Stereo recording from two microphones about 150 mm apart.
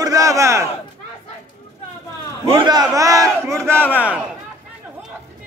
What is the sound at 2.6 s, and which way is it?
Speech, 30° right (ahead or behind).